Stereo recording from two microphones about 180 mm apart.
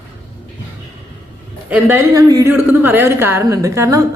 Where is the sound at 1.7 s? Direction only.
10° right (ahead or behind).